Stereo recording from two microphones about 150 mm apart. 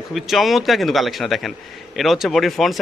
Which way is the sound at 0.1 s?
Centre (ahead or behind).